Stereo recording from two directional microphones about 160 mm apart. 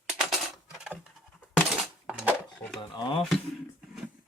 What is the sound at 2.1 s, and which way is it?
Dishes, 10° right (ahead or behind).